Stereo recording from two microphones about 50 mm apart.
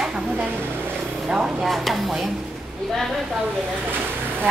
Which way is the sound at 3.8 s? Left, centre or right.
Right.